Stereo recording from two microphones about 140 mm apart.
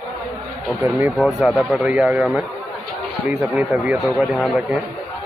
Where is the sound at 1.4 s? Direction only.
Centre (ahead or behind).